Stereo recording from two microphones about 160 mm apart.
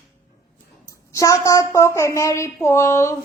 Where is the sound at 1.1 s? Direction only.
20° left (ahead or behind).